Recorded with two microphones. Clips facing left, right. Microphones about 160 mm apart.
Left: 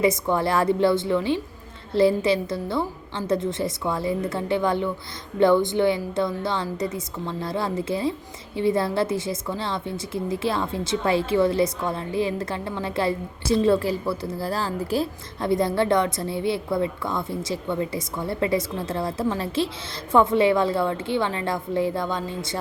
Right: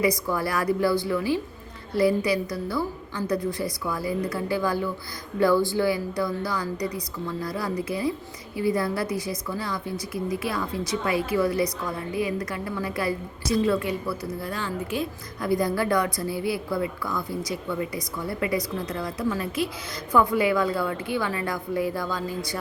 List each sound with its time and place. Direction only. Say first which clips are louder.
0.0 s speech: left 3 dB; 25° left (ahead or behind)